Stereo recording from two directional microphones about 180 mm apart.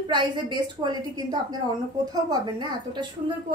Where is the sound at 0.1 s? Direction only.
25° right (ahead or behind).